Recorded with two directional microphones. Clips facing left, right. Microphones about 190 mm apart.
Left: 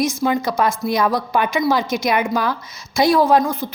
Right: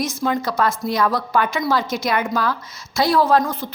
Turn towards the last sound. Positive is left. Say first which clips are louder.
# left 2 dB
turn(degrees=10)  # may be behind; listen again after turning